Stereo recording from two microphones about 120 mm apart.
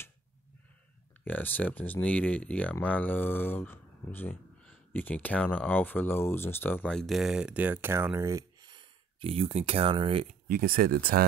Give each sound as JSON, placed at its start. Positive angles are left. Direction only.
{"t": 1.2, "sound": "speech", "side_deg": 15}
{"t": 6.9, "sound": "speech", "side_deg": 0}
{"t": 9.2, "sound": "speech", "side_deg": -55}